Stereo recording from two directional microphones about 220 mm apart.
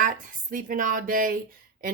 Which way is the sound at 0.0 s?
35° right (ahead or behind).